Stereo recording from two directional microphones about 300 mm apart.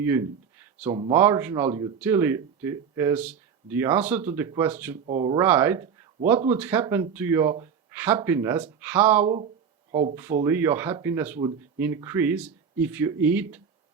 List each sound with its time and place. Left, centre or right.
0.0 s speech: centre
1.1 s speech: centre
9.2 s speech: centre
10.4 s speech: centre